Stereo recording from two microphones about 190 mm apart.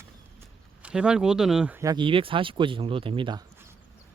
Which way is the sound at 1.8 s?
25° right (ahead or behind).